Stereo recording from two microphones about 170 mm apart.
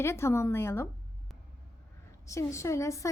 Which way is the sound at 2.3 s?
15° left (ahead or behind).